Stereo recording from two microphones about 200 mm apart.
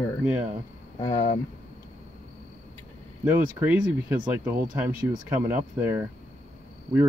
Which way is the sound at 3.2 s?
10° right (ahead or behind).